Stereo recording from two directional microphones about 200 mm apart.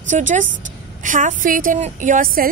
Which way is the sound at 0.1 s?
40° right (ahead or behind).